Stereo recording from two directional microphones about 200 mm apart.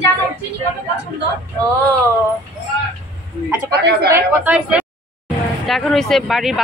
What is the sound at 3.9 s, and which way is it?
Speech, 55° right (ahead or behind).